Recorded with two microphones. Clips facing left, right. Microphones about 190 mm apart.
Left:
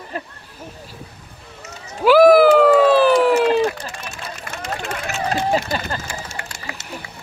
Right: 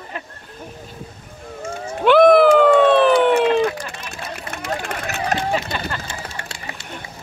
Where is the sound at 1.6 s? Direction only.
50° right (ahead or behind).